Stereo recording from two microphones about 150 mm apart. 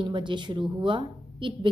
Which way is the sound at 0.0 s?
30° right (ahead or behind).